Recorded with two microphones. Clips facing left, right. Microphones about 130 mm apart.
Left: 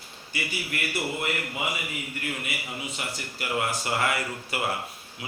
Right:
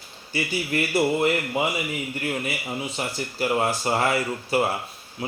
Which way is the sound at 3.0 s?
30° right (ahead or behind).